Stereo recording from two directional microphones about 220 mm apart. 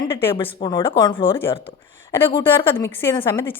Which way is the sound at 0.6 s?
20° left (ahead or behind).